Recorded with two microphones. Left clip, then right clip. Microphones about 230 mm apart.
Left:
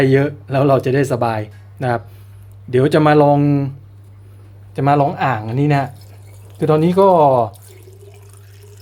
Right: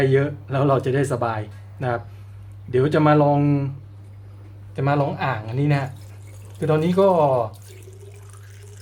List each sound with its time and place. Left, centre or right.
0.0 s speech: left
4.7 s speech: left